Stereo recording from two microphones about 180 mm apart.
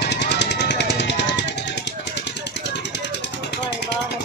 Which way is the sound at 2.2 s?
75° left (ahead or behind).